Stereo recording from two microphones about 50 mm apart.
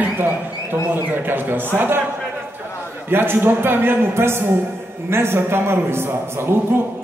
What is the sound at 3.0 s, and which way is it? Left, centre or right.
A man's voice, right.